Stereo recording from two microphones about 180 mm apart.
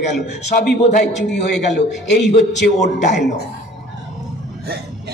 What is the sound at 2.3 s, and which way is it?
Speech, 45° left (ahead or behind).